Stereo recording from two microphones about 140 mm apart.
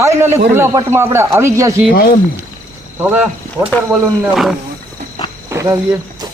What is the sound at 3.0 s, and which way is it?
A man's voice, 15° right (ahead or behind).